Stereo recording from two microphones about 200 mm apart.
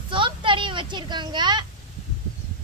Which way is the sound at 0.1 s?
25° right (ahead or behind).